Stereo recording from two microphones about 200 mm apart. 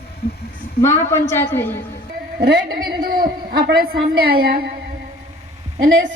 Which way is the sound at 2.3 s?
50° right (ahead or behind).